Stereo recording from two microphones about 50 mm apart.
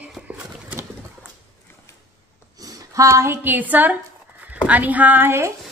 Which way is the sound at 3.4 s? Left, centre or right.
Right.